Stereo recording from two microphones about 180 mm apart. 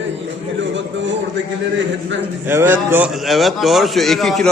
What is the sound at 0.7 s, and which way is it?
Speech, 85° right.